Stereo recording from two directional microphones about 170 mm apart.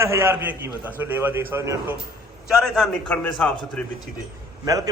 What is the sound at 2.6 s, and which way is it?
A man's voice, centre (ahead or behind).